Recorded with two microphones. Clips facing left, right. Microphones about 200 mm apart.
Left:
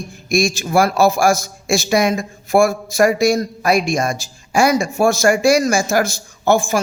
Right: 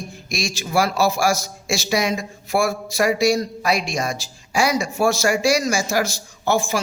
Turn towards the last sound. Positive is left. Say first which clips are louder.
# left 5 dB
turn(degrees=50)  # may be behind; listen again after turning